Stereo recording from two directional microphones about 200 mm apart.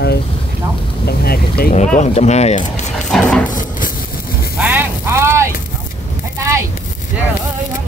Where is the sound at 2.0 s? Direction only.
35° left (ahead or behind).